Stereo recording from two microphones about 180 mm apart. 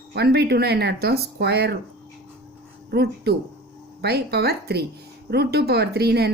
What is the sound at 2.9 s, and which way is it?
Speech, 65° right (ahead or behind).